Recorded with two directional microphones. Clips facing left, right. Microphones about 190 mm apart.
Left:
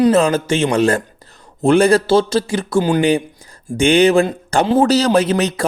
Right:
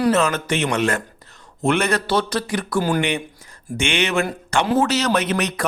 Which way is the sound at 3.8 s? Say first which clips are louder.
Left 10 dB; 35° left (ahead or behind).